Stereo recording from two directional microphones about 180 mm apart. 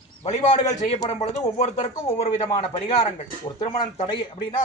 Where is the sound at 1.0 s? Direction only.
40° left (ahead or behind).